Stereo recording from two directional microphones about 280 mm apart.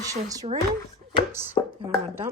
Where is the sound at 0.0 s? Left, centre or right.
Centre.